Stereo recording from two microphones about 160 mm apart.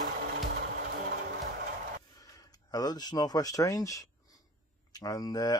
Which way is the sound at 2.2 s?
25° left (ahead or behind).